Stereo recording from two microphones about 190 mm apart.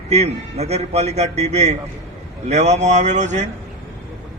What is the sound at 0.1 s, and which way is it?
A man's voice, 35° right (ahead or behind).